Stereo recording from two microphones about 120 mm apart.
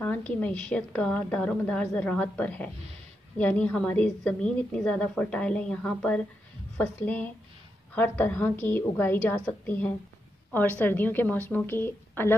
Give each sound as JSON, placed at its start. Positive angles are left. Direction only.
{"t": 0.0, "sound": "a woman's voice", "side_deg": 15}